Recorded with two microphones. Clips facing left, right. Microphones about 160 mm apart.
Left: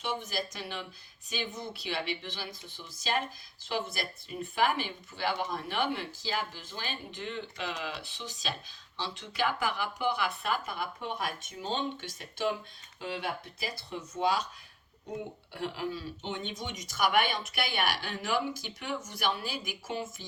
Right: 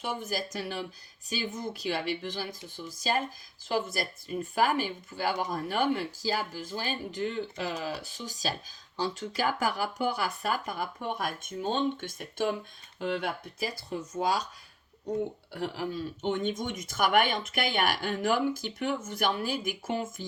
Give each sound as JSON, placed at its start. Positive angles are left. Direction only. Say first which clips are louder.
{"t": 0.0, "sound": "speech", "louder": "right 1 dB", "side_deg": -45}
{"t": 13.9, "sound": "speech", "louder": "even", "side_deg": -40}
{"t": 15.5, "sound": "speech", "louder": "right 2 dB", "side_deg": -45}